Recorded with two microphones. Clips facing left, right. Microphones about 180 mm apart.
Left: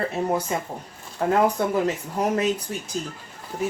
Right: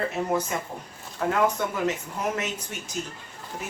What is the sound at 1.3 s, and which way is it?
Speech, 35° left (ahead or behind).